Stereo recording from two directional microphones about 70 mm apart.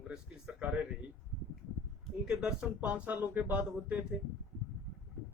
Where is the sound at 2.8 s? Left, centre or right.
Right.